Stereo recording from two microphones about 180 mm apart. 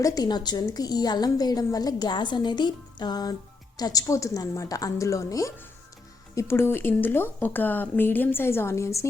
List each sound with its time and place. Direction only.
0.0 s a woman's voice: 20° left (ahead or behind)